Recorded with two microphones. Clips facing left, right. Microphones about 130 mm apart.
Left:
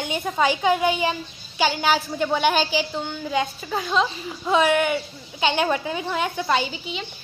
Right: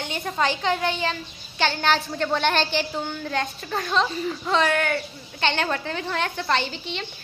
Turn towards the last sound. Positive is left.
turn(degrees=5)  # may be behind; listen again after turning